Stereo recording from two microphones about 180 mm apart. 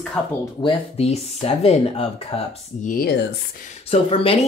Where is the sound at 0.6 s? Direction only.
30° left (ahead or behind).